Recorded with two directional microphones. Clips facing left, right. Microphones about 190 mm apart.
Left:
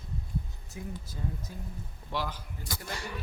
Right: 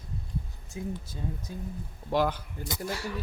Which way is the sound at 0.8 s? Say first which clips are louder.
Right 4 dB; 20° right (ahead or behind).